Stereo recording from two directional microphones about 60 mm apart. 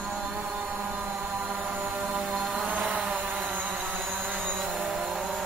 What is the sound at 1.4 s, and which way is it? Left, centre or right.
Chant, centre.